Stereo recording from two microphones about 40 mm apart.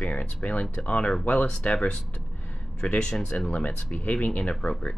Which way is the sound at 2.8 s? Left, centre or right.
Left.